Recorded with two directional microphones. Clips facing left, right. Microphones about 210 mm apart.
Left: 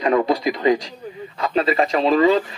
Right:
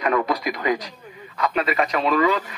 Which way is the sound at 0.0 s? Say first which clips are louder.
Left 4 dB; 25° left (ahead or behind).